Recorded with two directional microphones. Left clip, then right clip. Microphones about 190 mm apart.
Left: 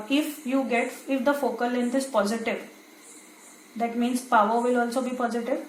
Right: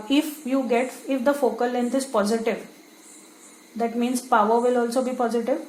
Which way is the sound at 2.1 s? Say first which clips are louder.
Right 1 dB; 50° right (ahead or behind).